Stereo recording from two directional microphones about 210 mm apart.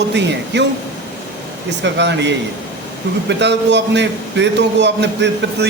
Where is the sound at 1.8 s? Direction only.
55° right (ahead or behind).